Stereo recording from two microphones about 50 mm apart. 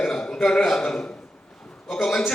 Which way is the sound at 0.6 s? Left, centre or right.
Centre.